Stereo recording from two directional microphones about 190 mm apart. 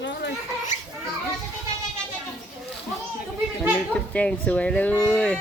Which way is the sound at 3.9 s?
5° left (ahead or behind).